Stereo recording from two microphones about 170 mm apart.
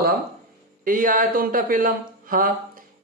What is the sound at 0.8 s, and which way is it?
Speech, 55° right (ahead or behind).